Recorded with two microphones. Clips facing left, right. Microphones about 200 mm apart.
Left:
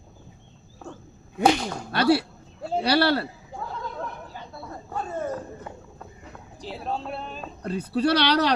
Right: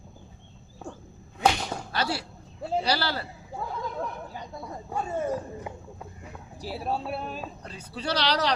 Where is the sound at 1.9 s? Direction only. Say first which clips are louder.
Left 11 dB; 60° left (ahead or behind).